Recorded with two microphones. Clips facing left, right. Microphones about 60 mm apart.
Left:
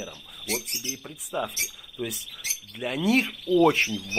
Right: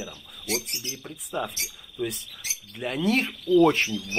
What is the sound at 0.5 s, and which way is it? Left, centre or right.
Speech, centre.